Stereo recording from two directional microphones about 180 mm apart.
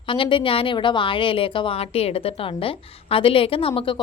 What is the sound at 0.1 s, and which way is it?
A woman's voice, 30° left (ahead or behind).